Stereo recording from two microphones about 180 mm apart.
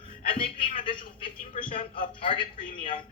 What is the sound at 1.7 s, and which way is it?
Speech, 30° left (ahead or behind).